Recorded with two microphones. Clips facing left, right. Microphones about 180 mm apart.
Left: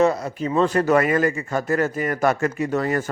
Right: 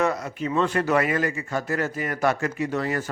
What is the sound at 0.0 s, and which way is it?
A man's voice, 30° left (ahead or behind).